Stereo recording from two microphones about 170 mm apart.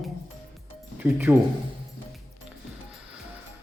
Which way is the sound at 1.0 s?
10° right (ahead or behind).